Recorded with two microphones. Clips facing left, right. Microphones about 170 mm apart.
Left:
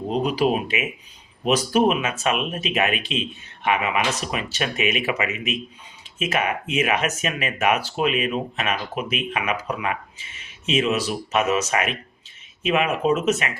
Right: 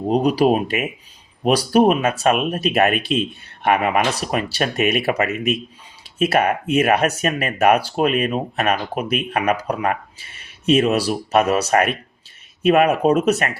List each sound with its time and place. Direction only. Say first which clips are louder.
0.1 s speech: right 5 dB; 40° right (ahead or behind)